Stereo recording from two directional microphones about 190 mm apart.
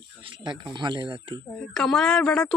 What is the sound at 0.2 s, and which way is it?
Speech, 25° right (ahead or behind).